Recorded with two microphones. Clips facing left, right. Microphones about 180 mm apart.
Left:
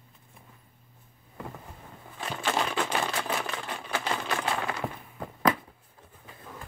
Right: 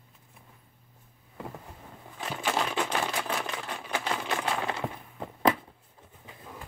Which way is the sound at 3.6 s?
Centre (ahead or behind).